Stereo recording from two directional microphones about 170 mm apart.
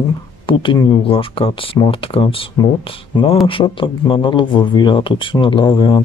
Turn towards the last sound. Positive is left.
turn(degrees=30)  # may be behind; listen again after turning